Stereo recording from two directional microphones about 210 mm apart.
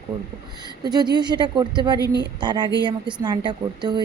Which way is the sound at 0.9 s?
20° right (ahead or behind).